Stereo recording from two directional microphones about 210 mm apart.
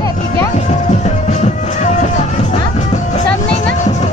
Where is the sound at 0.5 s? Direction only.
35° left (ahead or behind).